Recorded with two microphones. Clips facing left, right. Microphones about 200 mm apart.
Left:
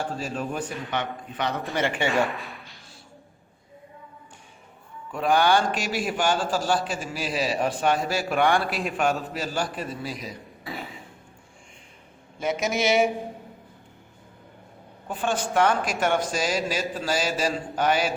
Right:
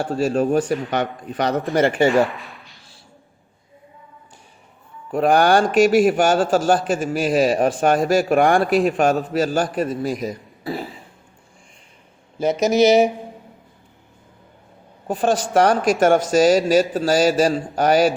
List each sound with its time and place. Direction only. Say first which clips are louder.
0.0 s speech: right 10 dB; 75° right (ahead or behind)
0.3 s a man's voice: right 12 dB; 45° right (ahead or behind)
2.2 s speech: right 4 dB; centre (ahead or behind)
5.1 s a man's voice: right 6 dB; 45° right (ahead or behind)
12.8 s speech: right 8 dB; 40° right (ahead or behind)
15.0 s a woman's voice: right 7 dB; 40° right (ahead or behind)